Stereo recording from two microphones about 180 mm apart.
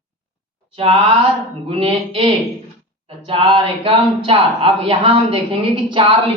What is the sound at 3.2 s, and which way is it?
A woman's voice, 30° right (ahead or behind).